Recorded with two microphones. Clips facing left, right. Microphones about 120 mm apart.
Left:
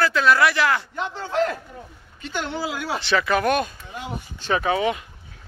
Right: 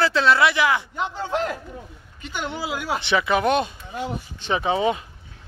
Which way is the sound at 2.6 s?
15° right (ahead or behind).